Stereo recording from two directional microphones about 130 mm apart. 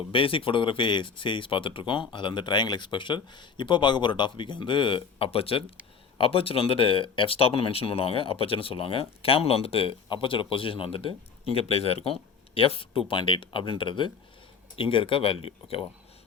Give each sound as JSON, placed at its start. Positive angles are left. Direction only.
{"t": 0.1, "sound": "speech", "side_deg": 45}